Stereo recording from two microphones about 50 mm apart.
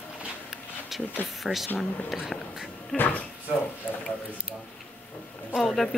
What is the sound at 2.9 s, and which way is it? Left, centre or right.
Speech, left.